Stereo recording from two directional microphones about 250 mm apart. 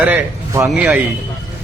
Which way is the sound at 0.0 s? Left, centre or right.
Centre.